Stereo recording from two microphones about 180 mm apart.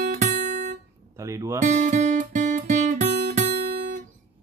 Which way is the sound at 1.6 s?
40° right (ahead or behind).